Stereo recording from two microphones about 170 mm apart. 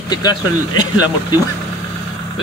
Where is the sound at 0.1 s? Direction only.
25° left (ahead or behind).